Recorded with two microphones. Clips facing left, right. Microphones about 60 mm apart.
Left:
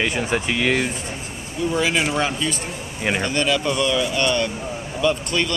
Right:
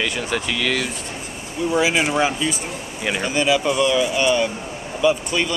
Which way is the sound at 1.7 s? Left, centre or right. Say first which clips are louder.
Right 2 dB; centre.